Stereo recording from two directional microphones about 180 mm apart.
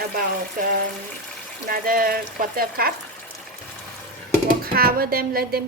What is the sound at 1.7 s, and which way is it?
Speech, 50° right (ahead or behind).